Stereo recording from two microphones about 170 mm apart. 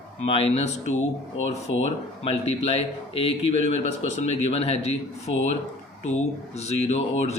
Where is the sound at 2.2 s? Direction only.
35° left (ahead or behind).